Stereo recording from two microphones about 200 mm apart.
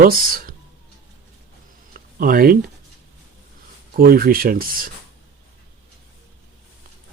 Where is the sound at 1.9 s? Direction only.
45° right (ahead or behind).